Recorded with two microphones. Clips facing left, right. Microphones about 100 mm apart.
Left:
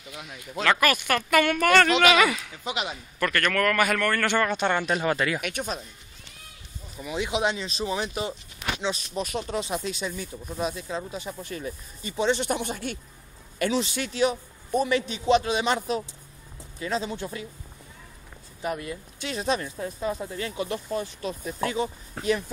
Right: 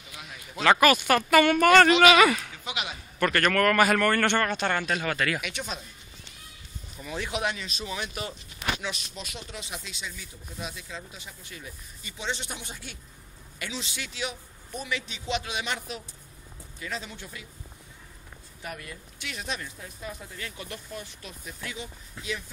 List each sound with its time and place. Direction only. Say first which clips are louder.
0.6 s speech: right 3 dB; 15° right (ahead or behind)
2.6 s speech: left 4 dB; 35° left (ahead or behind)
2.9 s a man's voice: right 1 dB; 10° right (ahead or behind)
4.3 s speech: left 2 dB; 10° left (ahead or behind)
5.4 s a man's voice: left 4 dB; 50° left (ahead or behind)
7.0 s speech: left 4 dB; 15° left (ahead or behind)
9.1 s a man's voice: left 11 dB; 45° left (ahead or behind)
18.6 s speech: left 9 dB; 25° left (ahead or behind)
22.1 s speech: left 9 dB; 50° left (ahead or behind)